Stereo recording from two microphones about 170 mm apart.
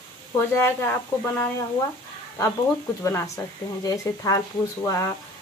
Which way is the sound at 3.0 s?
15° left (ahead or behind).